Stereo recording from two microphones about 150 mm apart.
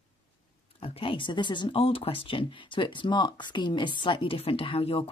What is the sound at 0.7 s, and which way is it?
Speech, 40° left (ahead or behind).